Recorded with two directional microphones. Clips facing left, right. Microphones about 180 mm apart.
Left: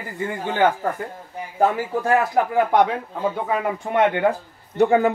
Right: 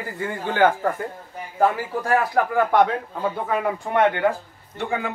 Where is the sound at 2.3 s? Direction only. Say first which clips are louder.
Right 1 dB; 20° left (ahead or behind).